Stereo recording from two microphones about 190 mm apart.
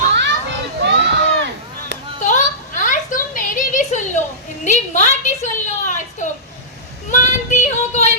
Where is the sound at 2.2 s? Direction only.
40° left (ahead or behind).